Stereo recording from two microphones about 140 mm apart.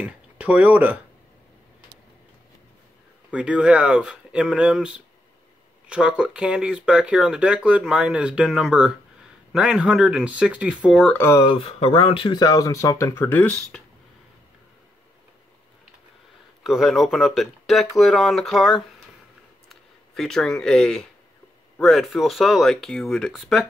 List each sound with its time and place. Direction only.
0.0 s speech: 10° right (ahead or behind)
3.3 s speech: 5° right (ahead or behind)
11.1 s speech: 20° left (ahead or behind)
11.4 s speech: 40° left (ahead or behind); by 13.8 s 5° left (ahead or behind)
16.6 s speech: centre (ahead or behind)